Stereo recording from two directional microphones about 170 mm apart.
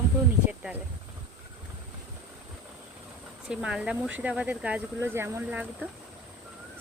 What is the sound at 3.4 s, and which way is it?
Speech, 5° right (ahead or behind).